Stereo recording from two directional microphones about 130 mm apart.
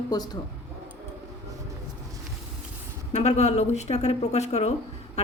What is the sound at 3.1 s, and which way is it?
Speech, 55° left (ahead or behind).